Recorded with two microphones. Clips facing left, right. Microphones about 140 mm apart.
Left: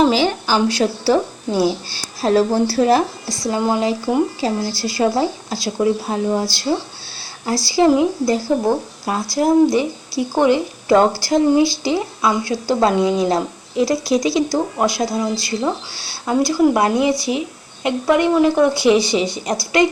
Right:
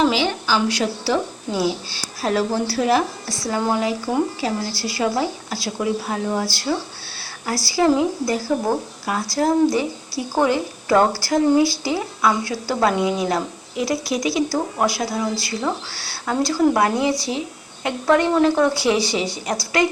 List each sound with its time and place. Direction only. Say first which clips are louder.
0.0 s a woman's voice: left 4 dB; 40° left (ahead or behind)
2.2 s speech: left 5 dB; 30° left (ahead or behind)
3.2 s a woman's voice: left 3 dB; 15° left (ahead or behind)